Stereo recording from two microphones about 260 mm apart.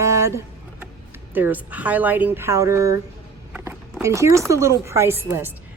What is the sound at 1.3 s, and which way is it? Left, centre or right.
Speech, centre.